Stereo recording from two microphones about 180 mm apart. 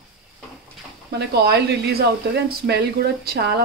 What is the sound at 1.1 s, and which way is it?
Speech, 65° right (ahead or behind).